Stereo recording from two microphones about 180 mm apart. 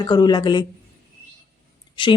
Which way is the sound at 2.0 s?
25° left (ahead or behind).